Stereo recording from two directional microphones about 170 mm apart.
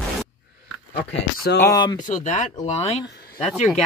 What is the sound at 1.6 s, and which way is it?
Speech, 20° left (ahead or behind).